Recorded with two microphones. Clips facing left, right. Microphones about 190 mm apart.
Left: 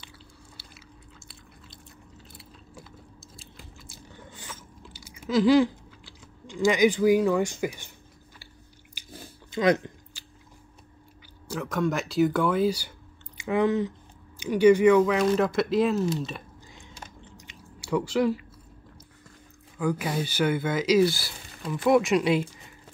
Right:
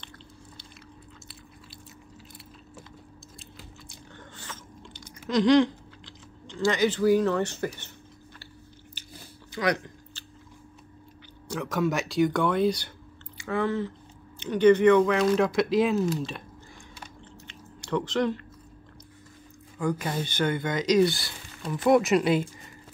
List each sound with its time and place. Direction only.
3.3 s biting: 5° left (ahead or behind)
5.2 s speech: 5° left (ahead or behind)
9.0 s biting: 10° left (ahead or behind)
9.5 s speech: 25° left (ahead or behind)
10.2 s biting: 10° left (ahead or behind)
11.4 s speech: centre (ahead or behind)
13.4 s speech: 15° left (ahead or behind); by 16.4 s centre (ahead or behind)
17.2 s chewing: 10° left (ahead or behind)
19.8 s speech: 5° left (ahead or behind)